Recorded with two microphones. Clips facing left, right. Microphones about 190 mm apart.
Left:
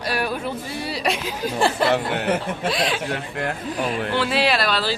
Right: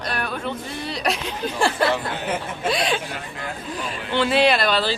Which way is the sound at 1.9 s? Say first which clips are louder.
Left 4 dB; 65° left (ahead or behind).